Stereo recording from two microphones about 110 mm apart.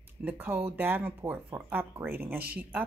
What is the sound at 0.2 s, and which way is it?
A woman's voice, 15° right (ahead or behind).